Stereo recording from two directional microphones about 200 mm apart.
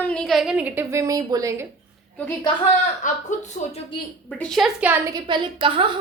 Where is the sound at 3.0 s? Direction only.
40° left (ahead or behind).